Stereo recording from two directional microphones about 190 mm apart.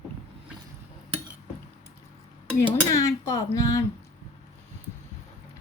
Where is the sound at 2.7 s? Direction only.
15° left (ahead or behind).